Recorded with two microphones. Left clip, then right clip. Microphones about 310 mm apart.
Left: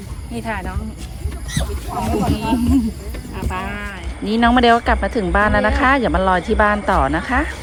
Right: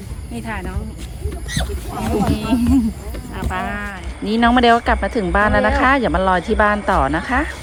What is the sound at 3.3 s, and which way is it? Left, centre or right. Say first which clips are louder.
Speech: right 2 dB; centre.